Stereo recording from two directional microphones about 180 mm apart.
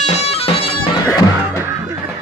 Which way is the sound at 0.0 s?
35° left (ahead or behind).